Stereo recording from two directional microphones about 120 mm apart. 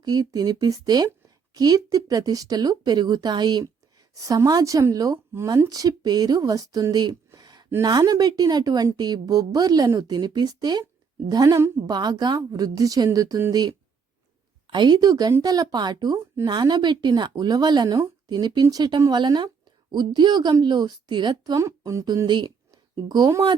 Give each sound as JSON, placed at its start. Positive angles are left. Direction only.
{"t": 0.0, "sound": "speech", "side_deg": -35}
{"t": 7.3, "sound": "a sound", "side_deg": -30}
{"t": 7.8, "sound": "speech", "side_deg": -35}